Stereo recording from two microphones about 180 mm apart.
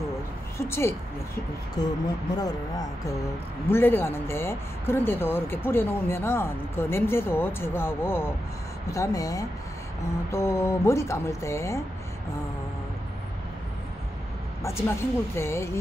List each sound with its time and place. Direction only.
0.6 s speech: 15° left (ahead or behind)
14.6 s speech: 15° left (ahead or behind)